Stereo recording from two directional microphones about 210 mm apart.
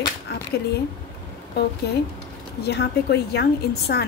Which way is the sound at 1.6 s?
50° left (ahead or behind).